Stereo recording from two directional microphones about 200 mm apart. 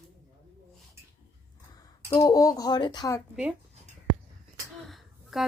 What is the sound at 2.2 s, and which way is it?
Speech, 20° left (ahead or behind).